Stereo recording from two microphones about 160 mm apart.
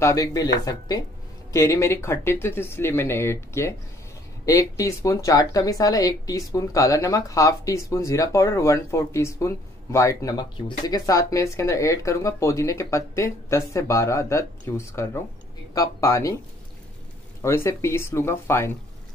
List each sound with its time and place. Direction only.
0.0 s speech: 20° left (ahead or behind)
17.4 s speech: 15° left (ahead or behind)